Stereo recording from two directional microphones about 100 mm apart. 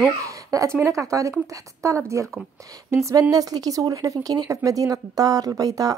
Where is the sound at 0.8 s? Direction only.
35° right (ahead or behind).